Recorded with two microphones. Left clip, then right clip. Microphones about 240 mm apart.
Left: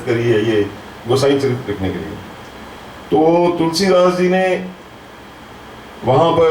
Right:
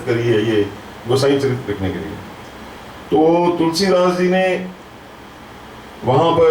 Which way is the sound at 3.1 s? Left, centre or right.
Right.